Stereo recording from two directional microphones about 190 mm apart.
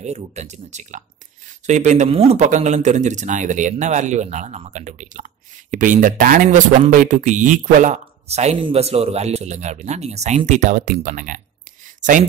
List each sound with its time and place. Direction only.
0.0 s speech: 35° right (ahead or behind)